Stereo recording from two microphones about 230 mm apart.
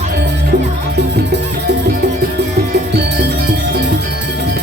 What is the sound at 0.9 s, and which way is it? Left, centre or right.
Music, right.